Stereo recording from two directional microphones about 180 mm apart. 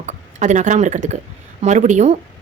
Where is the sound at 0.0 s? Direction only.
40° right (ahead or behind).